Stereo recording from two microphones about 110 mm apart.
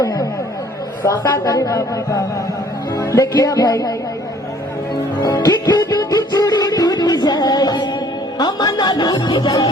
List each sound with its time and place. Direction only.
0.0 s chatter: 35° left (ahead or behind)
1.0 s a man's voice: 35° left (ahead or behind)
5.2 s a man's voice: 35° left (ahead or behind)
6.1 s music: 35° left (ahead or behind)